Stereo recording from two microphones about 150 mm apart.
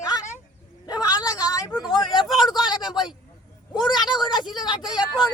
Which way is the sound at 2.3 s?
5° right (ahead or behind).